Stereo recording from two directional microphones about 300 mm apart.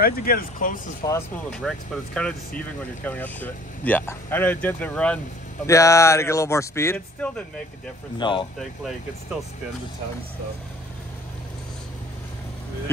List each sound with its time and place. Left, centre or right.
0.0 s speech: left
1.0 s speech: centre